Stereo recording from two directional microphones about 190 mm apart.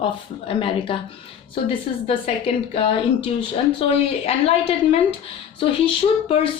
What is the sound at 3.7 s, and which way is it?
Speech, 30° left (ahead or behind).